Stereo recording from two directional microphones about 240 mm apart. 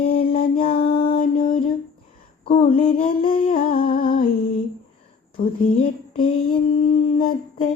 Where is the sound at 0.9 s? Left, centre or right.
Left.